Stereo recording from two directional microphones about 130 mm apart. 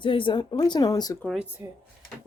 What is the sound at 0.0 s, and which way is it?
Speech, 40° left (ahead or behind).